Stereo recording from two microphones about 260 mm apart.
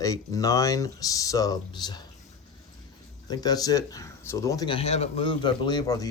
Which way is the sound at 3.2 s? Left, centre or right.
Centre.